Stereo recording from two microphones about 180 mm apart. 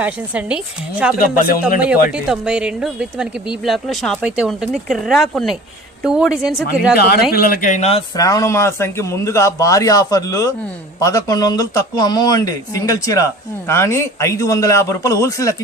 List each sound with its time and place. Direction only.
0.0 s a woman's voice: 5° right (ahead or behind)
1.1 s speech: 50° left (ahead or behind)
2.1 s speech: 5° right (ahead or behind)
6.9 s speech: 60° left (ahead or behind); by 8.0 s 35° left (ahead or behind)
8.1 s a man's voice: 20° left (ahead or behind)